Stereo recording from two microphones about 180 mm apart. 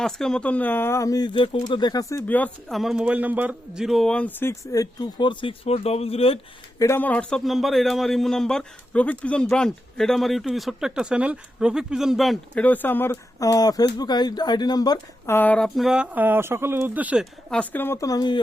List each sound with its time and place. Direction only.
0.0 s speech: 5° left (ahead or behind); by 6.4 s 35° left (ahead or behind)
6.7 s a man's voice: 15° left (ahead or behind); by 17.2 s 10° right (ahead or behind)
17.5 s speech: 10° left (ahead or behind)